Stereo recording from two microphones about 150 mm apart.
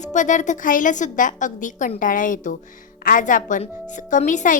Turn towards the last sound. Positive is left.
turn(degrees=55)  # may be behind; listen again after turning